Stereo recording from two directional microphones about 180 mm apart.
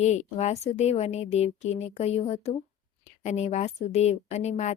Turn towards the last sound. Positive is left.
turn(degrees=40)  # may be behind; listen again after turning